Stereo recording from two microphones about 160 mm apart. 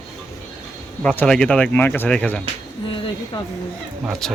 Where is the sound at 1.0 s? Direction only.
5° left (ahead or behind).